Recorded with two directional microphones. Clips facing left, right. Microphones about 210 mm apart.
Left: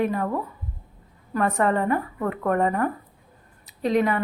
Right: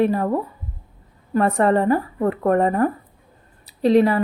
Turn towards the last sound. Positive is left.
turn(degrees=-35)  # may be behind; listen again after turning